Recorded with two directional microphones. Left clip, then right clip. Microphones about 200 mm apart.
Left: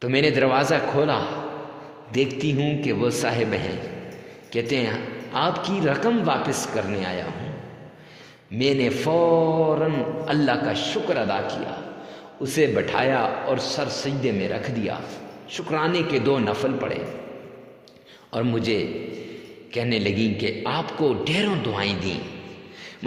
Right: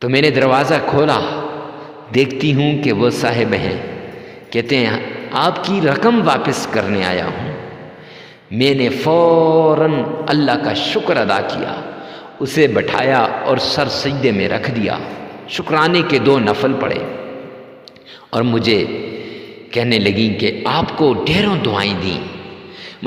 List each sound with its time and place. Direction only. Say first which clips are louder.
0.0 s mantra: right 7 dB; 30° right (ahead or behind)
8.5 s mantra: right 7 dB; 35° right (ahead or behind)
18.3 s mantra: right 9 dB; 40° right (ahead or behind)